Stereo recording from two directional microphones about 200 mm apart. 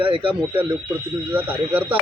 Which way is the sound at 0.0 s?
25° right (ahead or behind).